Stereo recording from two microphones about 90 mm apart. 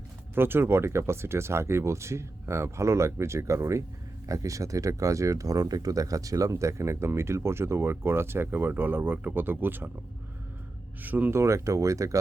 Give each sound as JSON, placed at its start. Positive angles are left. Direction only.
{"t": 0.3, "sound": "speech", "side_deg": -25}
{"t": 11.0, "sound": "speech", "side_deg": -20}
{"t": 11.3, "sound": "speech", "side_deg": -35}